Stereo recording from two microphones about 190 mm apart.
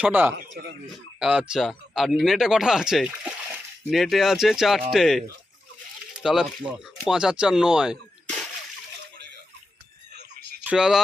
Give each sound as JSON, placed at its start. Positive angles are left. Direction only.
{"t": 0.0, "sound": "speech", "side_deg": -10}
{"t": 0.5, "sound": "speech", "side_deg": -60}
{"t": 1.2, "sound": "speech", "side_deg": -5}
{"t": 6.2, "sound": "speech", "side_deg": 0}
{"t": 10.6, "sound": "speech", "side_deg": -5}